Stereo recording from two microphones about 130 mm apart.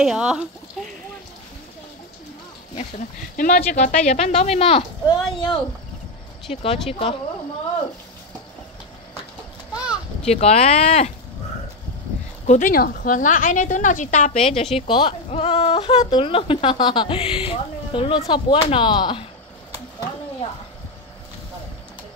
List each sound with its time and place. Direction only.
0.0 s speech: 5° right (ahead or behind)
3.0 s speech: 85° left; by 4.8 s 50° left (ahead or behind)
5.0 s speech: 35° left (ahead or behind)
6.5 s speech: 45° left (ahead or behind)
10.2 s speech: 55° left (ahead or behind)
12.4 s a woman's voice: 80° left
14.4 s speech: 50° left (ahead or behind)